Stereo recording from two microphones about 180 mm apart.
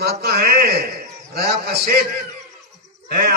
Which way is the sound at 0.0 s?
60° right (ahead or behind).